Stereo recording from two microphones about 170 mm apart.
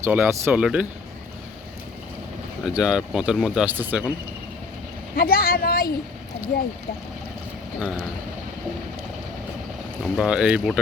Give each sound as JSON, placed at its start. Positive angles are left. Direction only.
{"t": 0.0, "sound": "speech", "side_deg": -15}
{"t": 2.6, "sound": "speech", "side_deg": -5}
{"t": 5.1, "sound": "speech", "side_deg": 60}
{"t": 10.2, "sound": "speech", "side_deg": -5}